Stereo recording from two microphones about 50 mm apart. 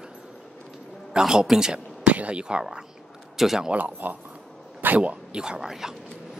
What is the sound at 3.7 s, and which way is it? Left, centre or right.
Speech, right.